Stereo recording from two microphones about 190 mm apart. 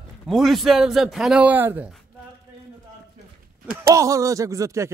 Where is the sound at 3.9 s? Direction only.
15° right (ahead or behind).